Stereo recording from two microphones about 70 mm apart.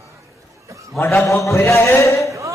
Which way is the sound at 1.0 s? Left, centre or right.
Left.